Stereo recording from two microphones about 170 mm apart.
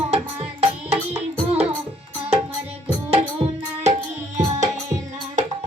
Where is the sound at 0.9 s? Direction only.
40° right (ahead or behind).